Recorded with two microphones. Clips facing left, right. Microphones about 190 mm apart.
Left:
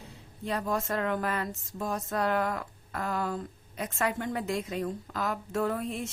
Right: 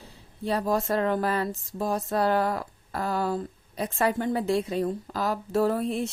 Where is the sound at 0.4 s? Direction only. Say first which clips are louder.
Right 5 dB; 35° right (ahead or behind).